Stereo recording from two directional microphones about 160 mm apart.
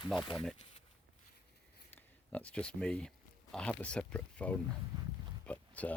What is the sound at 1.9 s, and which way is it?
Speech, 10° left (ahead or behind).